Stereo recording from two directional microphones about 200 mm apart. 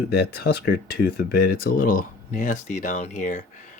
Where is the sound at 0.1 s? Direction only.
50° left (ahead or behind).